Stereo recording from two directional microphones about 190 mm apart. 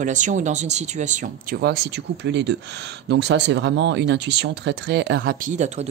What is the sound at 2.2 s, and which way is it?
Speech, 65° right (ahead or behind).